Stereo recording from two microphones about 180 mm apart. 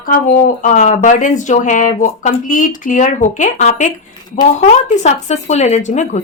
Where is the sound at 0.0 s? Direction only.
50° left (ahead or behind).